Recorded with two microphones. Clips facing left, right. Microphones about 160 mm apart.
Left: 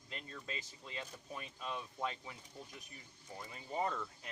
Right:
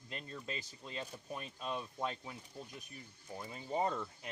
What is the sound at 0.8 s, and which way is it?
Speech, 15° right (ahead or behind).